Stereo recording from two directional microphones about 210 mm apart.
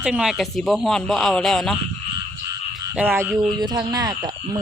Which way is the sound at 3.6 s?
20° right (ahead or behind).